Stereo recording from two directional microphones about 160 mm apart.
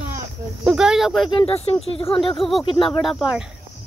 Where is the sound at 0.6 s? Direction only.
5° right (ahead or behind).